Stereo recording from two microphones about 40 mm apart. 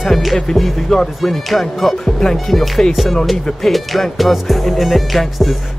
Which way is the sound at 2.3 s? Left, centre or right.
Centre.